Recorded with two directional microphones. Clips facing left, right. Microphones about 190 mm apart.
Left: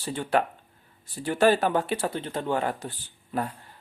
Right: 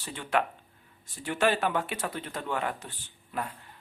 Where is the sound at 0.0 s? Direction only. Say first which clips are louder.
Left 4 dB; 35° left (ahead or behind).